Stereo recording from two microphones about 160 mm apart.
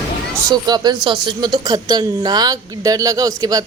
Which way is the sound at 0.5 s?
25° right (ahead or behind).